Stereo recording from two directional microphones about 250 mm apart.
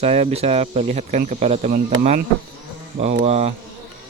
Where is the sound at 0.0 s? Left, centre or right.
Right.